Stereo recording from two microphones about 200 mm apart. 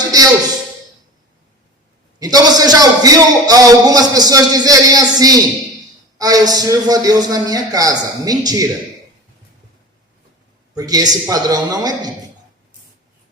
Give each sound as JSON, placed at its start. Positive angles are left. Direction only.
{"t": 0.0, "sound": "music", "side_deg": -20}
{"t": 2.1, "sound": "a man's voice", "side_deg": -20}
{"t": 10.8, "sound": "a man's voice", "side_deg": -20}